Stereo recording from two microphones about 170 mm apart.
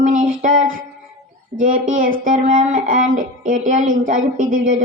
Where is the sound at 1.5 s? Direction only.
20° right (ahead or behind).